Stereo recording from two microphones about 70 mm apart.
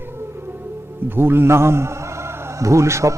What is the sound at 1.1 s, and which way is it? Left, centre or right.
A man's voice, right.